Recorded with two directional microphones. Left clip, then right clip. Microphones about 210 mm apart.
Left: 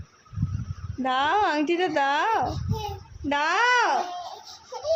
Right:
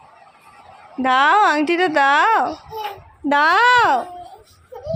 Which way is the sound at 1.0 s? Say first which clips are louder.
Right 9 dB; 10° right (ahead or behind).